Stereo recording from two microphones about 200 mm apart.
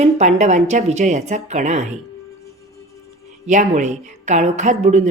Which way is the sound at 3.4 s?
35° right (ahead or behind).